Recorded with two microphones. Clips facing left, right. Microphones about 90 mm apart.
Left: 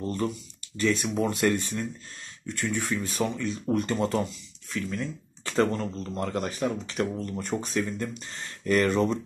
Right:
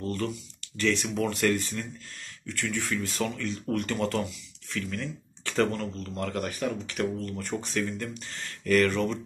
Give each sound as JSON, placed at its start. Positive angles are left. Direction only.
{"t": 0.0, "sound": "speech", "side_deg": 20}